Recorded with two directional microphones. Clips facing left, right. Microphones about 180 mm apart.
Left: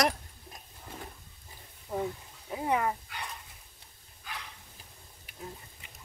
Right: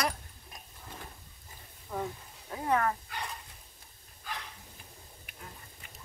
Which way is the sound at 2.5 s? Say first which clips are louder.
Even; 15° left (ahead or behind).